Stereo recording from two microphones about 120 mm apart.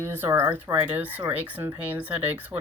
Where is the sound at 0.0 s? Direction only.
20° right (ahead or behind).